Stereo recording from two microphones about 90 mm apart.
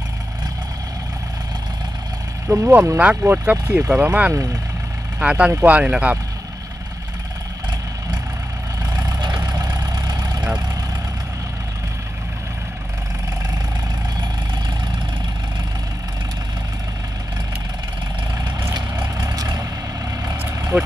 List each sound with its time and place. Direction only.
2.4 s speech: 30° right (ahead or behind)
3.0 s speech: 15° right (ahead or behind)
4.3 s speech: 35° right (ahead or behind)
5.2 s speech: 15° right (ahead or behind)
8.9 s vehicle: 50° right (ahead or behind)
19.1 s vehicle: 45° right (ahead or behind)